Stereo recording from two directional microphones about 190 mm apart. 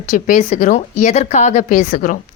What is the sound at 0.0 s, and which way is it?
A woman's voice, 40° left (ahead or behind).